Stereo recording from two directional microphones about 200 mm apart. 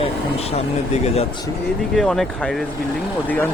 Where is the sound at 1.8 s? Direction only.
Centre (ahead or behind).